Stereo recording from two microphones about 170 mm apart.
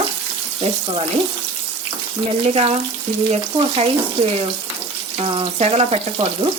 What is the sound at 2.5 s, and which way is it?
Speech, 40° right (ahead or behind).